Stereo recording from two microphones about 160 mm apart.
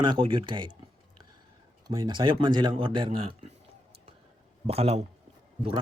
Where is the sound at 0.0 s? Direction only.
30° right (ahead or behind).